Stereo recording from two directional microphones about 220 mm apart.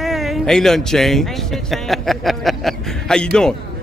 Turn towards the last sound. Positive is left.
turn(degrees=5)  # may be behind; listen again after turning